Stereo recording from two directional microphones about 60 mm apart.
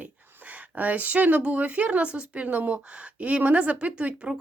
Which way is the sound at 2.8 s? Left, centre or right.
Centre.